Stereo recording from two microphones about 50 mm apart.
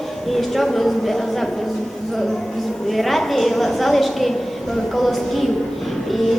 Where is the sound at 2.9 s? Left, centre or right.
Centre.